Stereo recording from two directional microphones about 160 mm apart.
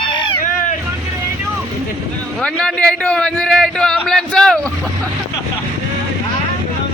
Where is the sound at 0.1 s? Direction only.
30° left (ahead or behind).